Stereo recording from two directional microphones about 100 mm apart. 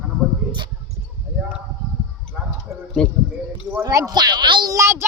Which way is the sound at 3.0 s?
10° left (ahead or behind).